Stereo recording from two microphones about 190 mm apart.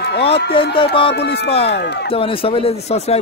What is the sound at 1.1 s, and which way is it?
Speech, 60° left (ahead or behind).